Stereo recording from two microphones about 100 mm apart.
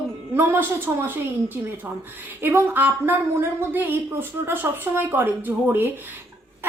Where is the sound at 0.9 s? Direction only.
25° right (ahead or behind).